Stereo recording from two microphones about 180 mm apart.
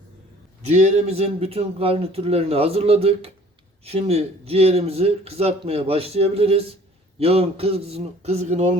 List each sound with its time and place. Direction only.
0.6 s a man's voice: 40° right (ahead or behind)